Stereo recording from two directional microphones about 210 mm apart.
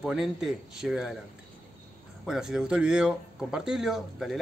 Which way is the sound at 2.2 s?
5° right (ahead or behind).